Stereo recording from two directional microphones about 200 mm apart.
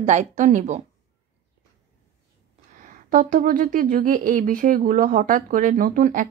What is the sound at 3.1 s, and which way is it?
Speech, 45° right (ahead or behind).